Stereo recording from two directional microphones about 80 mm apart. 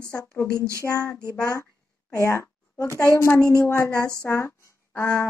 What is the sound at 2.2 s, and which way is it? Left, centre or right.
A woman's voice, left.